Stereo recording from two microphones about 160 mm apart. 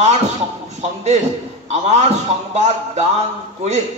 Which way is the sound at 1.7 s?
45° right (ahead or behind).